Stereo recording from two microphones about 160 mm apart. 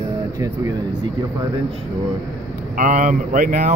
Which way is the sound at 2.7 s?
50° right (ahead or behind).